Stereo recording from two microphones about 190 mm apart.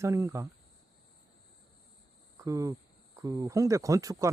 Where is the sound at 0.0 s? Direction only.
15° right (ahead or behind).